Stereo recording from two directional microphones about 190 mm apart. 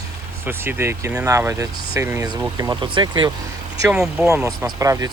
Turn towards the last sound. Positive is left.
turn(degrees=-20)  # may be behind; listen again after turning